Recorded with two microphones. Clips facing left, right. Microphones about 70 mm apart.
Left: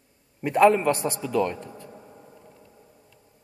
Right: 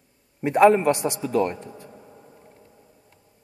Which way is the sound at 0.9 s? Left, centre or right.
Left.